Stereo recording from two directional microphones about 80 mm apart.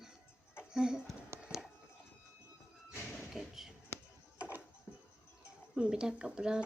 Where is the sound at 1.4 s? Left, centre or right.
Centre.